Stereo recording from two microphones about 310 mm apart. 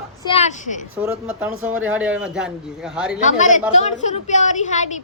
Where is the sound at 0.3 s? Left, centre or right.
Left.